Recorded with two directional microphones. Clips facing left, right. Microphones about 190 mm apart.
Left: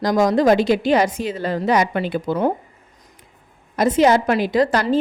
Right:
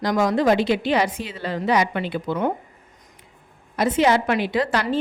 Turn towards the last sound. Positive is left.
turn(degrees=40)  # may be behind; listen again after turning